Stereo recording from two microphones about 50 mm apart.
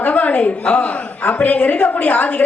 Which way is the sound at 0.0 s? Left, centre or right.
Left.